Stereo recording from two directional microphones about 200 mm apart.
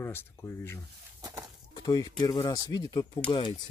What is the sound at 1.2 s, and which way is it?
Horse, 20° right (ahead or behind).